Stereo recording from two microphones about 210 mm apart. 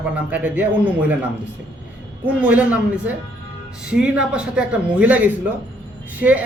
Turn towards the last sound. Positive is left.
turn(degrees=-5)  # may be behind; listen again after turning